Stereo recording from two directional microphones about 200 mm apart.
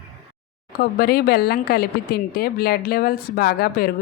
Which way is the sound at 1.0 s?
50° left (ahead or behind).